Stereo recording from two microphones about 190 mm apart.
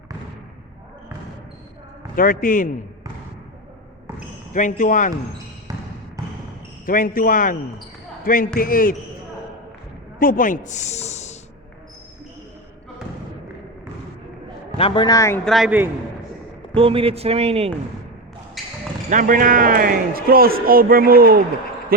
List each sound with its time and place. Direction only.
2.1 s speech: 50° left (ahead or behind)
4.5 s speech: 40° left (ahead or behind)
6.8 s speech: 45° left (ahead or behind)
10.2 s speech: 45° left (ahead or behind)
14.8 s a man's voice: 25° left (ahead or behind)
15.4 s a man's voice: centre (ahead or behind)
16.7 s speech: 30° right (ahead or behind)
18.6 s basketball bounce: centre (ahead or behind)
19.1 s a man's voice: 45° right (ahead or behind)